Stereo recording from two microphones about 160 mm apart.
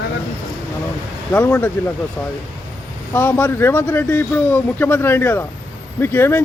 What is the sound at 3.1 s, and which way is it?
Speech, 10° left (ahead or behind).